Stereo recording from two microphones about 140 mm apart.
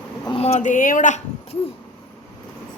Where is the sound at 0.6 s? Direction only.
65° left (ahead or behind).